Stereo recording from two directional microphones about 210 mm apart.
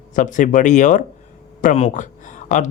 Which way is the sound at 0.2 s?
35° left (ahead or behind).